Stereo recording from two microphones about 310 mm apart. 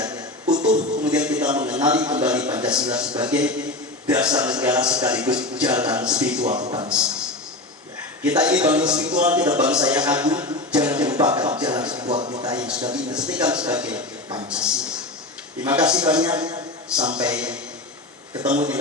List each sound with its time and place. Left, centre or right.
0.0 s music: centre
1.0 s a sound: centre
1.5 s a man's voice: centre
6.4 s a man's voice: centre
6.9 s a man's voice: centre
11.9 s a sound: centre
13.1 s a man's voice: centre